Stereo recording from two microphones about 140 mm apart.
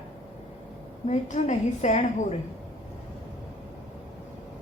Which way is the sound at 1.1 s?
55° left (ahead or behind).